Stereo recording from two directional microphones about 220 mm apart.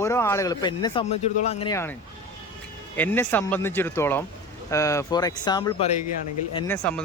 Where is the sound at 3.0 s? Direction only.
10° left (ahead or behind).